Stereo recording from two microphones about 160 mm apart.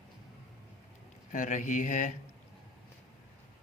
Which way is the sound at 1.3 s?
50° left (ahead or behind).